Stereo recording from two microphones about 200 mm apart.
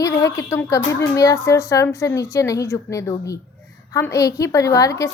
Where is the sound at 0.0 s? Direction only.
15° left (ahead or behind).